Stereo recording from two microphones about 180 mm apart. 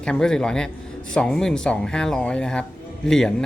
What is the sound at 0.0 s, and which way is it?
Speech, 5° left (ahead or behind).